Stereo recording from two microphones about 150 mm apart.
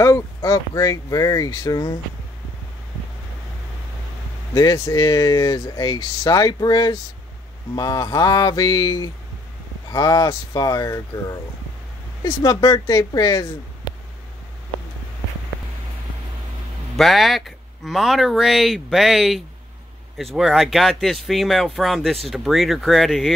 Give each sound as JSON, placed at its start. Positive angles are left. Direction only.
{"t": 0.0, "sound": "speech", "side_deg": 20}
{"t": 4.6, "sound": "speech", "side_deg": 25}
{"t": 16.9, "sound": "speech", "side_deg": 0}